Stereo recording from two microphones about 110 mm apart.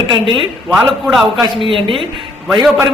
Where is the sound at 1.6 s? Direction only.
50° right (ahead or behind).